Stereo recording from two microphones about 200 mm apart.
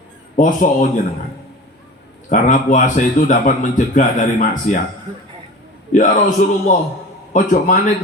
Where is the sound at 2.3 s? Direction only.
40° left (ahead or behind).